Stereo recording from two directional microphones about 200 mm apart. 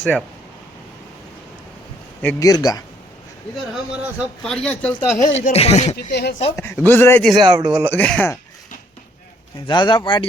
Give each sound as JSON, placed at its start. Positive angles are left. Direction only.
{"t": 0.0, "sound": "speech", "side_deg": 0}
{"t": 2.2, "sound": "speech", "side_deg": 15}
{"t": 3.9, "sound": "speech", "side_deg": -5}
{"t": 5.2, "sound": "speech", "side_deg": 35}
{"t": 6.1, "sound": "speech", "side_deg": 55}
{"t": 6.6, "sound": "speech", "side_deg": 10}
{"t": 7.4, "sound": "speech", "side_deg": -30}
{"t": 7.9, "sound": "speech", "side_deg": 5}
{"t": 9.6, "sound": "speech", "side_deg": 20}